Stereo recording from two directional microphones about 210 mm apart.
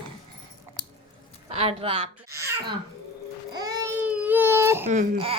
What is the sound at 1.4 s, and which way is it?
Speech, 30° right (ahead or behind).